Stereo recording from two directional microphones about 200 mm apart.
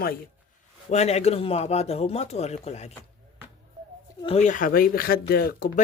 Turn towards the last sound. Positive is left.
turn(degrees=50)  # may be behind; listen again after turning